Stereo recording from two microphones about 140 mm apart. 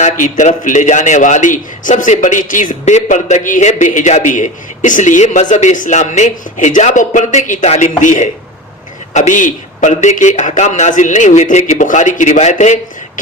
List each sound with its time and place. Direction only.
0.0 s a man's voice: 60° left (ahead or behind)